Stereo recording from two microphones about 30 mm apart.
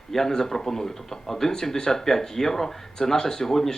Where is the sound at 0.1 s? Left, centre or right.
Centre.